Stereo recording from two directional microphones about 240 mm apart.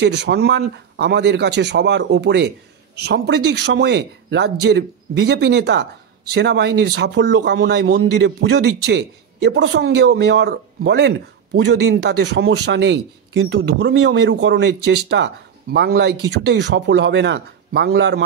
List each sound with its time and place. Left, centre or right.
0.0 s a man's voice: right